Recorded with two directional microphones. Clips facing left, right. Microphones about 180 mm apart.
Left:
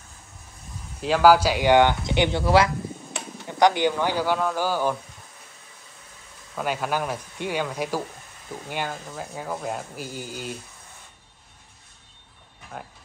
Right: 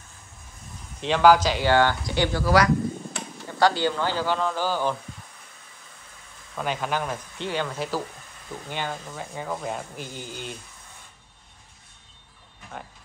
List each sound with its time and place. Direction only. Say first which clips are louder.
1.0 s speech: left 1 dB; 5° left (ahead or behind)
6.5 s speech: left 1 dB; 5° left (ahead or behind)
12.7 s speech: left 1 dB; 5° left (ahead or behind)